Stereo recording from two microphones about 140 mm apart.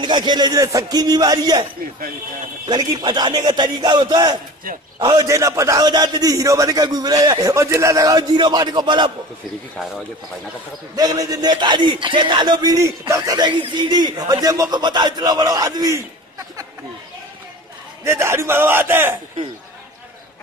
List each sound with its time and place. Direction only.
0.0 s a man's voice: 30° right (ahead or behind)
2.6 s music: 30° right (ahead or behind)
4.9 s a man's voice: 30° right (ahead or behind)
11.0 s music: 25° right (ahead or behind)
18.0 s a man's voice: 20° right (ahead or behind)